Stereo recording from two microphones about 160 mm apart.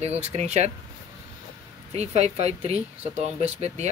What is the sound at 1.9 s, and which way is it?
Speech, 40° right (ahead or behind).